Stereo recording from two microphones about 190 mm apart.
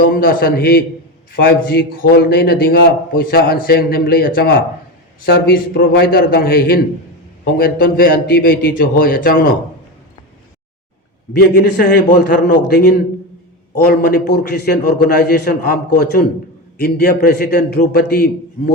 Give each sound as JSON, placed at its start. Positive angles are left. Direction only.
{"t": 0.0, "sound": "a man's voice", "side_deg": 50}
{"t": 11.3, "sound": "a man's voice", "side_deg": 55}
{"t": 13.9, "sound": "a man's voice", "side_deg": 55}